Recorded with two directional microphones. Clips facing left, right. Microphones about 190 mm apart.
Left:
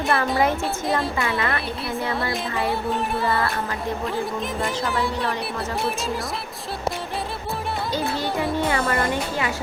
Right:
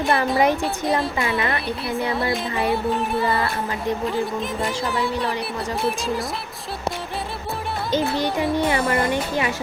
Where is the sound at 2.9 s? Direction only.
Centre (ahead or behind).